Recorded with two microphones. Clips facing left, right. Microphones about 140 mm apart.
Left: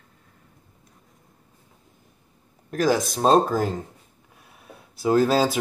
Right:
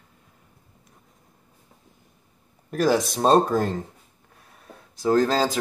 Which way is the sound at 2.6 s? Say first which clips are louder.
Right 1 dB; centre (ahead or behind).